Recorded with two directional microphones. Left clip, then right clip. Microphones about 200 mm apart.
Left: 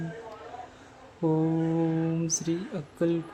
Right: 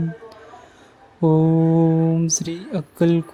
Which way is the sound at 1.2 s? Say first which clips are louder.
Right 9 dB; 30° right (ahead or behind).